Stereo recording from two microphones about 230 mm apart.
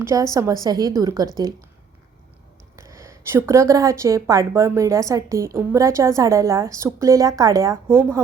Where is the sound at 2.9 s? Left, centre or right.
Centre.